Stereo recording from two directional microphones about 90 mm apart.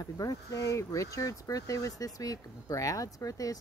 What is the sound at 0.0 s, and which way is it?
Speech, 40° left (ahead or behind).